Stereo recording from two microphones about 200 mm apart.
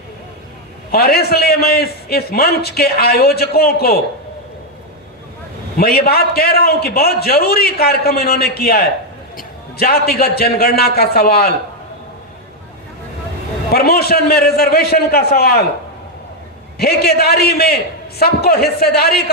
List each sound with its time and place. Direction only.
0.9 s a man's voice: 50° left (ahead or behind)
5.7 s a man's voice: 50° left (ahead or behind)
13.7 s a man's voice: 50° left (ahead or behind)
16.7 s a man's voice: 50° left (ahead or behind)